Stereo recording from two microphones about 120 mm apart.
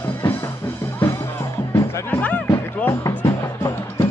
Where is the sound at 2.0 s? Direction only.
15° left (ahead or behind).